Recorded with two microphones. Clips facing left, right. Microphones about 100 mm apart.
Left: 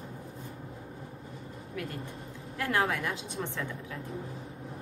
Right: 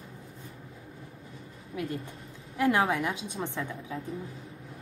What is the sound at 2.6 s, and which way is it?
A woman's voice, 20° right (ahead or behind).